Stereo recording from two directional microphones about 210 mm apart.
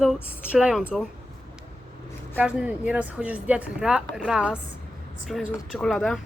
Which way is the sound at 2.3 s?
5° right (ahead or behind).